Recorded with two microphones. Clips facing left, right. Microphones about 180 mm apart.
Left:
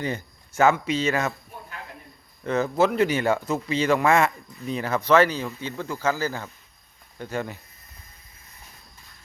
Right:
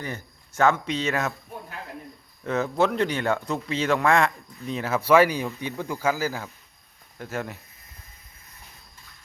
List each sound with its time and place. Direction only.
0.0 s a sound: 15° left (ahead or behind)
0.6 s a man's voice: 5° left (ahead or behind)
2.4 s a man's voice: centre (ahead or behind)